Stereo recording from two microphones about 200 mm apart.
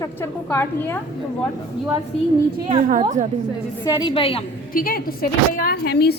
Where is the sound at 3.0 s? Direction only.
35° right (ahead or behind).